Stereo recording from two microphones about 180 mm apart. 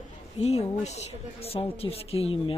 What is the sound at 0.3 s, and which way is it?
A woman's voice, 35° left (ahead or behind).